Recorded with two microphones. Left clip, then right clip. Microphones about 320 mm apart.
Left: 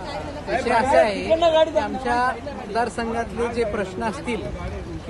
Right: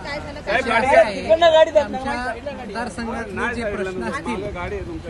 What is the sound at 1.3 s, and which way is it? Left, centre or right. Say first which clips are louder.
Speech: right 5 dB; right.